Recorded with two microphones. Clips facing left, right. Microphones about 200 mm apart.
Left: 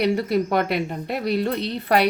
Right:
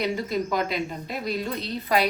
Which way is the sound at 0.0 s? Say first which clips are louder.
Left 6 dB; 65° left (ahead or behind).